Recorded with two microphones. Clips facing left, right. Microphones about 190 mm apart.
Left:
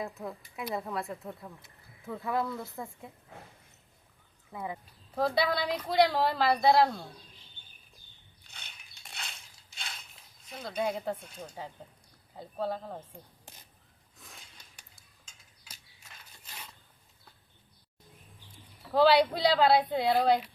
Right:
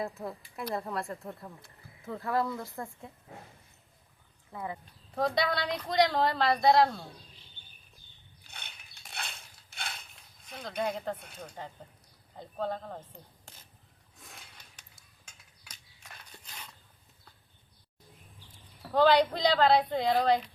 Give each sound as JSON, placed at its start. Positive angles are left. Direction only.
{"t": 0.2, "sound": "speech", "side_deg": 0}
{"t": 4.5, "sound": "speech", "side_deg": 10}
{"t": 8.4, "sound": "mechanisms", "side_deg": -60}
{"t": 9.1, "sound": "dishes", "side_deg": -60}
{"t": 10.6, "sound": "speech", "side_deg": 5}
{"t": 15.2, "sound": "a sound", "side_deg": -60}
{"t": 16.4, "sound": "a sound", "side_deg": 5}
{"t": 18.9, "sound": "speech", "side_deg": 5}